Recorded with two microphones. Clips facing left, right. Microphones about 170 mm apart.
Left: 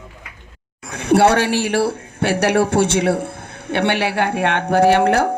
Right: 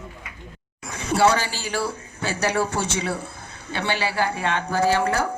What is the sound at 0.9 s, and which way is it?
A man's voice, 60° left (ahead or behind).